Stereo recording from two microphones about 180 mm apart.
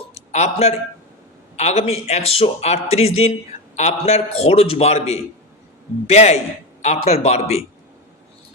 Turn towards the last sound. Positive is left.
turn(degrees=35)  # may be behind; listen again after turning